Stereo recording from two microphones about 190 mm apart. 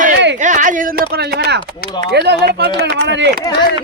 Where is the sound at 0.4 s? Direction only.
40° right (ahead or behind).